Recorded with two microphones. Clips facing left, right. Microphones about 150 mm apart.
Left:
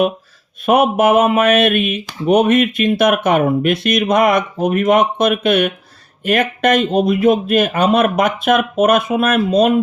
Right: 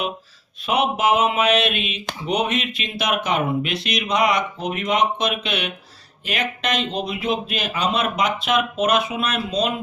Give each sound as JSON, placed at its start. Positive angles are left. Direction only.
{"t": 0.6, "sound": "speech", "side_deg": 55}